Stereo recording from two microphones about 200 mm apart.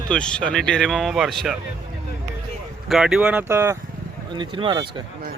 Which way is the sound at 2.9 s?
Centre (ahead or behind).